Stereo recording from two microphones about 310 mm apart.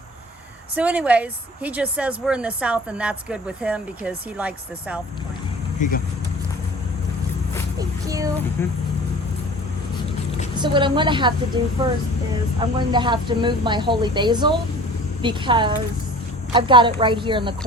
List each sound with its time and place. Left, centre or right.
0.8 s a woman's voice: centre
7.8 s child singing: centre
10.6 s speech: centre